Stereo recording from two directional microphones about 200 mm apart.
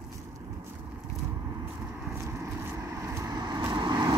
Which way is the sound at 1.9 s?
10° right (ahead or behind).